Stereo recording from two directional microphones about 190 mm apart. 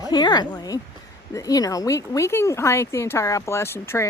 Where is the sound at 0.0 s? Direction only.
20° left (ahead or behind).